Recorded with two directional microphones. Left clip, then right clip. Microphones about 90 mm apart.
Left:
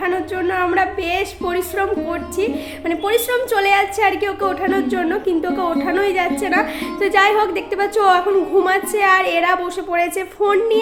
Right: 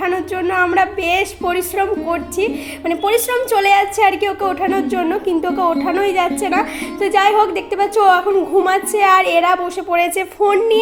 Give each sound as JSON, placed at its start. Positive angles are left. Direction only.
{"t": 0.0, "sound": "speech", "side_deg": -40}
{"t": 10.4, "sound": "speech", "side_deg": -30}